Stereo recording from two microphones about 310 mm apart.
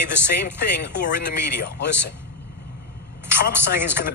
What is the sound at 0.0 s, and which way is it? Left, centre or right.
Speech, left.